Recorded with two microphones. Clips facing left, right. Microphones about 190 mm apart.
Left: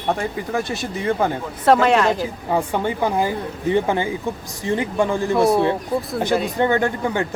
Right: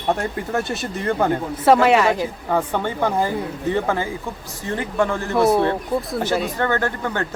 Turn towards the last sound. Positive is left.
turn(degrees=15)  # may be behind; listen again after turning